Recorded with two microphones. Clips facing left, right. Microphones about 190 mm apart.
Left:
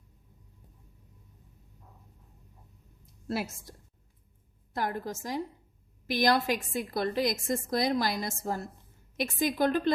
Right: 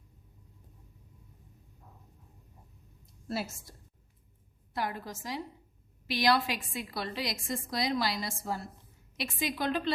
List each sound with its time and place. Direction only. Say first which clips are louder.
3.2 s a woman's voice: left 3 dB; 55° left (ahead or behind)